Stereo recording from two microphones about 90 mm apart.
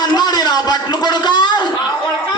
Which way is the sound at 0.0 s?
50° left (ahead or behind).